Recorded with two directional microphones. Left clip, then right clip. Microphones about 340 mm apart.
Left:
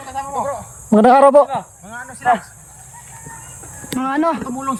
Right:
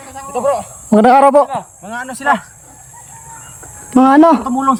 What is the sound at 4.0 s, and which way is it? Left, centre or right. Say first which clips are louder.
Speech: right 10 dB; centre.